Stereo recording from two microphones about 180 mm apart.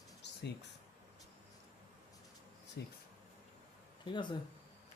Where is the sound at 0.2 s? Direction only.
75° left (ahead or behind).